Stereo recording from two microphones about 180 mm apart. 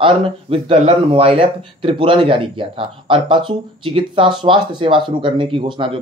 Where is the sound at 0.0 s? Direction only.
30° right (ahead or behind).